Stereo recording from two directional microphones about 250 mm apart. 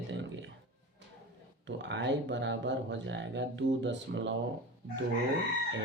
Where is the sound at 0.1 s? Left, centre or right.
Right.